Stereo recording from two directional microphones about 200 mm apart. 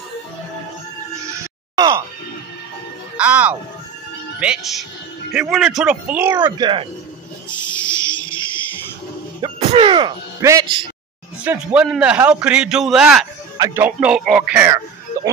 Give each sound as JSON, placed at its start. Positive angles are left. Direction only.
{"t": 1.8, "sound": "music", "side_deg": -15}
{"t": 3.2, "sound": "a man's voice", "side_deg": -5}
{"t": 6.5, "sound": "speech", "side_deg": -25}
{"t": 7.6, "sound": "music", "side_deg": 25}
{"t": 8.1, "sound": "a sound", "side_deg": 5}
{"t": 9.4, "sound": "speech", "side_deg": -30}
{"t": 11.4, "sound": "a man's voice", "side_deg": -5}